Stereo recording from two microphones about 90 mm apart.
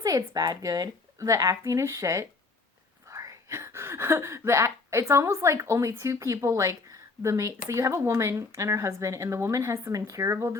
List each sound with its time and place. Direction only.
0.0 s speech: 40° right (ahead or behind)